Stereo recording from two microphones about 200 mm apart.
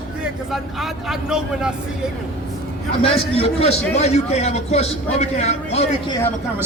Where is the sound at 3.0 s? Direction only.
30° left (ahead or behind).